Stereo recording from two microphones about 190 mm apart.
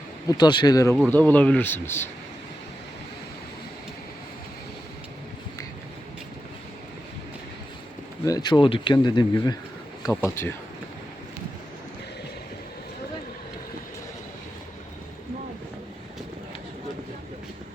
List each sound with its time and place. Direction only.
0.3 s speech: 20° left (ahead or behind)
0.9 s speech: 5° left (ahead or behind)
8.2 s speech: 20° left (ahead or behind)